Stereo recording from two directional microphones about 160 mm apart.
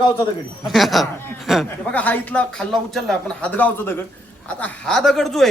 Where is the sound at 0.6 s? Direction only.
Centre (ahead or behind).